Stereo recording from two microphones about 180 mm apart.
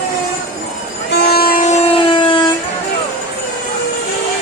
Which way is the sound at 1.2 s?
60° left (ahead or behind).